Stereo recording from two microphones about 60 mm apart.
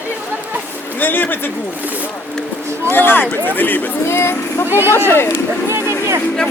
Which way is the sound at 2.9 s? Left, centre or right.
Left.